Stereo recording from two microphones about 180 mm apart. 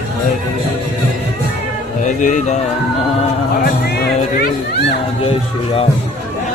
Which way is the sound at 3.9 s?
65° left (ahead or behind).